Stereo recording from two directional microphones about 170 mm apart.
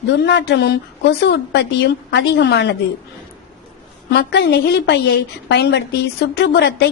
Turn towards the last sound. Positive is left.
turn(degrees=90)